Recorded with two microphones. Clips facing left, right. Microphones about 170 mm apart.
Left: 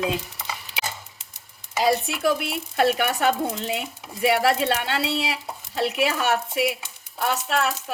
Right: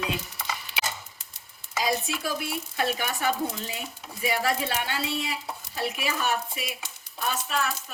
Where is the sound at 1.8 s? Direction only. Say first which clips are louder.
Left 7 dB; 65° left (ahead or behind).